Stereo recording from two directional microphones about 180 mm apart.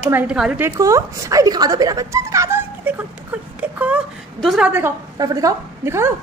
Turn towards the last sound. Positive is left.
turn(degrees=-15)  # may be behind; listen again after turning